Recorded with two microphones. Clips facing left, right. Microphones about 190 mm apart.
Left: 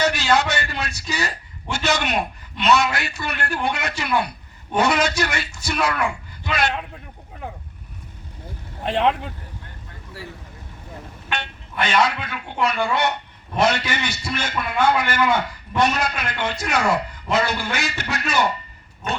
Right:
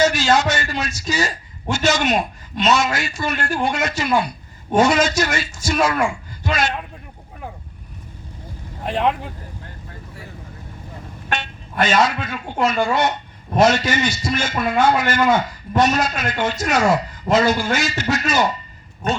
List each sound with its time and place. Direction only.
0.0 s a man's voice: 60° left (ahead or behind)
8.8 s speech: 5° right (ahead or behind)
11.3 s vehicle: 60° left (ahead or behind)
12.0 s a man's voice: 60° left (ahead or behind)